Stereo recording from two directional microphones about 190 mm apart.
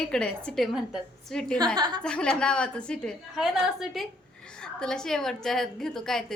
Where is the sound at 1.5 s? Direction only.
20° right (ahead or behind).